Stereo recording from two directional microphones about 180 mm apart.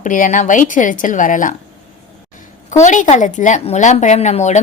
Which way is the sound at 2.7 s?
45° left (ahead or behind).